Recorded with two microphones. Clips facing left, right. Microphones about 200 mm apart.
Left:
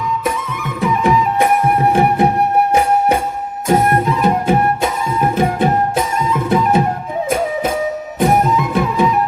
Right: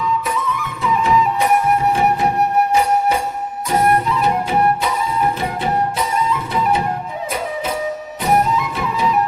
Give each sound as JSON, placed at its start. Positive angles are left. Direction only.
{"t": 0.8, "sound": "music", "side_deg": 55}
{"t": 3.7, "sound": "music", "side_deg": 50}
{"t": 8.2, "sound": "music", "side_deg": 50}